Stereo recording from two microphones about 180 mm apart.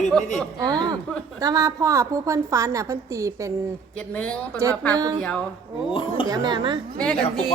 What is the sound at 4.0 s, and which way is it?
Speech, 5° left (ahead or behind).